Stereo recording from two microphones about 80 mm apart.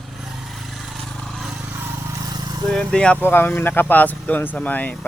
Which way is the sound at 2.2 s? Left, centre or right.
Right.